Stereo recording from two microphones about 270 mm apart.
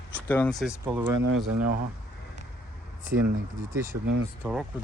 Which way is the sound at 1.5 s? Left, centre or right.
Right.